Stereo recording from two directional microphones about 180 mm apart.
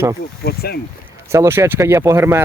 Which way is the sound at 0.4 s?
60° left (ahead or behind).